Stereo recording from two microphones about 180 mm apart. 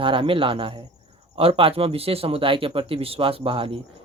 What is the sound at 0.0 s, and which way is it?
A man's voice, 30° right (ahead or behind).